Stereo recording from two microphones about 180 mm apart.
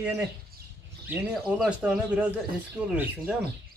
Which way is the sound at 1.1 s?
10° right (ahead or behind).